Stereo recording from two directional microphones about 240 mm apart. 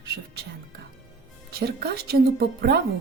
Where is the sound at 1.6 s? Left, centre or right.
Right.